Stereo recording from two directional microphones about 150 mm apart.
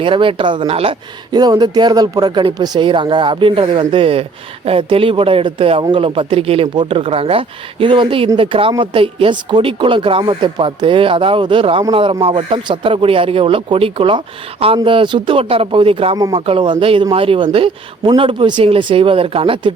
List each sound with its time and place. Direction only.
0.0 s speech: 35° right (ahead or behind)
1.3 s speech: 25° right (ahead or behind)